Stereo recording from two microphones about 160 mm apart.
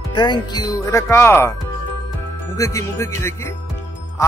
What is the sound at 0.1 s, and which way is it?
Speech, 30° left (ahead or behind).